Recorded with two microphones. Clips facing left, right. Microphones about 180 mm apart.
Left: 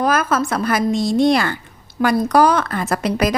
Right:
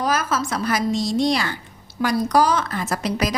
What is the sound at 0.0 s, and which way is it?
A woman's voice, 55° left (ahead or behind).